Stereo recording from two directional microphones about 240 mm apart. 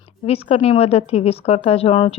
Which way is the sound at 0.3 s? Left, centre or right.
Left.